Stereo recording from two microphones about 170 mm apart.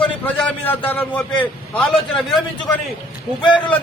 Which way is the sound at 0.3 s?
10° left (ahead or behind).